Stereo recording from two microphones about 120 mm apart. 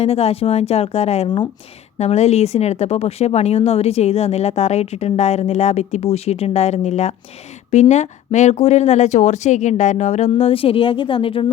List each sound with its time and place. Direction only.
0.0 s a woman's voice: 60° left (ahead or behind)